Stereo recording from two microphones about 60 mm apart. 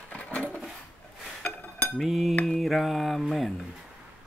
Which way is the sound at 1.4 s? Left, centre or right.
Left.